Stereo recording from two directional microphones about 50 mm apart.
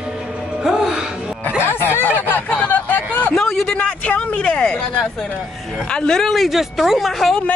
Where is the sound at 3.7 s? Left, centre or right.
Left.